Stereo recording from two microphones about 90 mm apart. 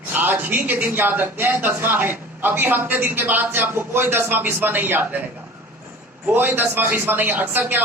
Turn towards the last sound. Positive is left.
turn(degrees=-20)  # may be behind; listen again after turning